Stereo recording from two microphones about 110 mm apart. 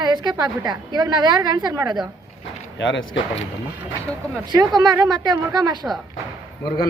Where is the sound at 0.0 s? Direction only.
40° right (ahead or behind).